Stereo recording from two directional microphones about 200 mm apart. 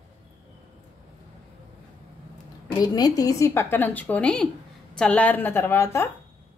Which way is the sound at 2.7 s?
20° left (ahead or behind).